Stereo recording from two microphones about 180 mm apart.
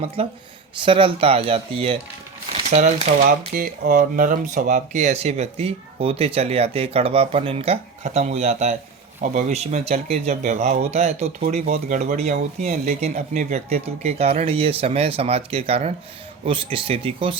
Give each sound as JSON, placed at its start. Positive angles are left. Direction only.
{"t": 0.8, "sound": "speech", "side_deg": -30}
{"t": 3.2, "sound": "speech", "side_deg": -50}